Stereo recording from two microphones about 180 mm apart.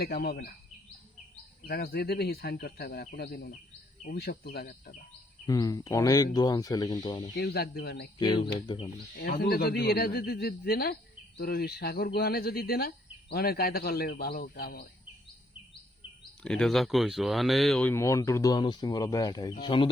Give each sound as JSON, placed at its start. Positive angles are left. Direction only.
{"t": 0.0, "sound": "speech", "side_deg": 60}
{"t": 1.6, "sound": "speech", "side_deg": 60}
{"t": 5.5, "sound": "speech", "side_deg": 20}
{"t": 7.3, "sound": "speech", "side_deg": 60}
{"t": 8.2, "sound": "speech", "side_deg": 25}
{"t": 9.1, "sound": "speech", "side_deg": 60}
{"t": 16.4, "sound": "speech", "side_deg": 5}
{"t": 17.9, "sound": "speech", "side_deg": 15}